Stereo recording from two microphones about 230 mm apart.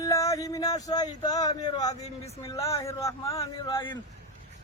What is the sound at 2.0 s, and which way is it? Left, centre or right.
Mantra, left.